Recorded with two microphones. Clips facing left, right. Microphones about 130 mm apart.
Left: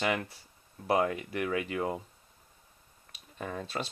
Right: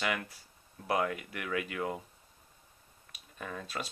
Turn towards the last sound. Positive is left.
turn(degrees=30)  # may be behind; listen again after turning